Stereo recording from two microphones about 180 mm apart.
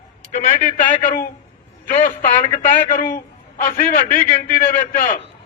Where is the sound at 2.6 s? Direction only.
50° left (ahead or behind).